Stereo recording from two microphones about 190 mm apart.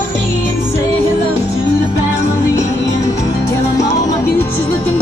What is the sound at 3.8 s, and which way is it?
Music, 20° left (ahead or behind).